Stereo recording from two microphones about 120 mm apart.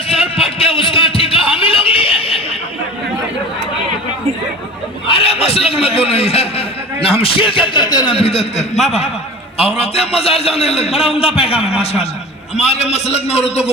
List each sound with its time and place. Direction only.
0.1 s a sound: 55° left (ahead or behind)
5.0 s a man's voice: 55° left (ahead or behind); by 8.1 s 35° left (ahead or behind)
8.1 s a man's voice: 55° left (ahead or behind)